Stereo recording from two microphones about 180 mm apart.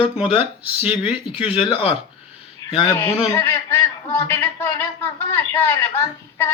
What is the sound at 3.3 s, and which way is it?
Speech, 15° left (ahead or behind).